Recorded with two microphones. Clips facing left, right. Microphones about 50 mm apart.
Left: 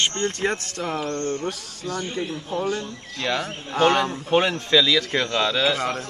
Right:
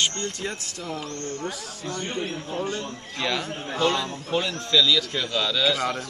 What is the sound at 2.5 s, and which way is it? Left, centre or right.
Speech, right.